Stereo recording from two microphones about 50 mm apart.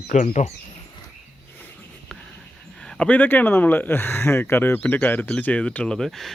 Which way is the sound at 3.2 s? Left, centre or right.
Left.